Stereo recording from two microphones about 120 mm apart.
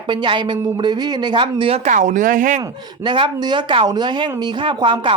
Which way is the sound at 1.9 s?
90° right.